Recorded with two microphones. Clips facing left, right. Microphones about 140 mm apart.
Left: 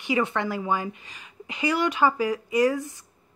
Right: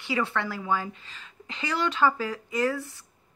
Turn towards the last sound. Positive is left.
turn(degrees=15)  # may be behind; listen again after turning